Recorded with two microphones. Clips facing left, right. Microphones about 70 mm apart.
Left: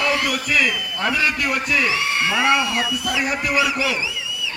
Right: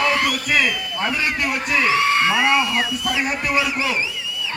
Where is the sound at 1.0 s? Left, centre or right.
Left.